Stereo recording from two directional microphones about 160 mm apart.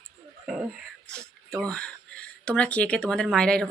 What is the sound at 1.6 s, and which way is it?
A man's voice, 5° left (ahead or behind).